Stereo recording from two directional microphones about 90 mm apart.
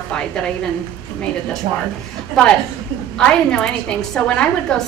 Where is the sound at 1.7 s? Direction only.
75° right (ahead or behind).